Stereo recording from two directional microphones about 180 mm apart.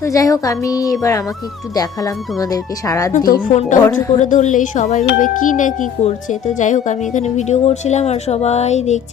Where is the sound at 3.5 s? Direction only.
40° left (ahead or behind).